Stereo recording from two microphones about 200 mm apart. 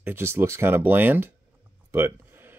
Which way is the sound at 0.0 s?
10° right (ahead or behind).